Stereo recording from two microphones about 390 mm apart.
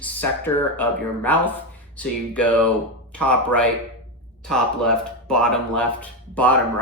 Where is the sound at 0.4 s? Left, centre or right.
Centre.